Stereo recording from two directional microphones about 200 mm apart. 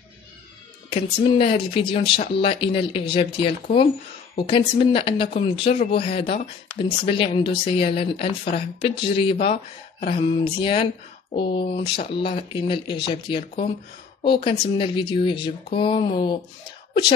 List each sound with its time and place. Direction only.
1.4 s speech: 25° left (ahead or behind)
5.7 s speech: 45° left (ahead or behind)
6.0 s speech: 25° left (ahead or behind)
11.8 s speech: 55° left (ahead or behind)
12.1 s speech: 25° left (ahead or behind)